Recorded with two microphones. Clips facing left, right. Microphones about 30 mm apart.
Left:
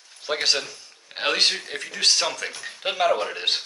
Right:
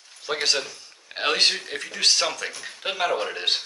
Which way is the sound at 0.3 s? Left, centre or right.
Centre.